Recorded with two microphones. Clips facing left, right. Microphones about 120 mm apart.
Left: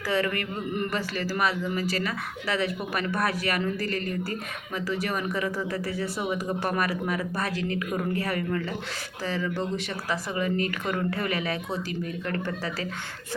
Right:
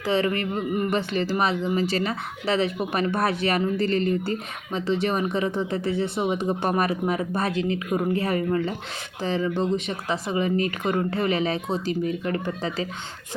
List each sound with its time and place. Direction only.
0.0 s speech: 25° right (ahead or behind)
0.7 s speech: 15° right (ahead or behind)
0.9 s speech: 25° right (ahead or behind)